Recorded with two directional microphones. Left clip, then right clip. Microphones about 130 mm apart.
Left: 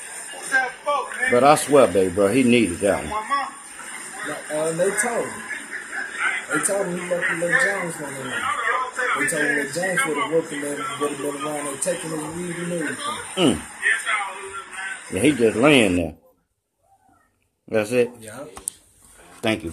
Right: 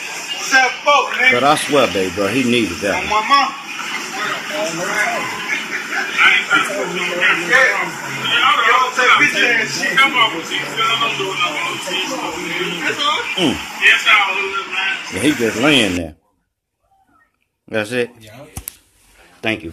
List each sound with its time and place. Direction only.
0.0 s a man's voice: 35° right (ahead or behind)
15.6 s speech: 5° right (ahead or behind)
17.7 s speech: centre (ahead or behind)
19.4 s a man's voice: 25° left (ahead or behind)